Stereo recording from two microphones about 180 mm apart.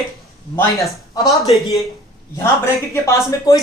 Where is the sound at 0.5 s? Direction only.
20° left (ahead or behind).